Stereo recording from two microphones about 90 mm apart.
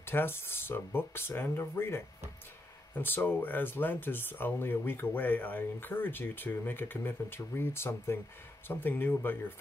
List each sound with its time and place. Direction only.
0.0 s speech: 25° left (ahead or behind)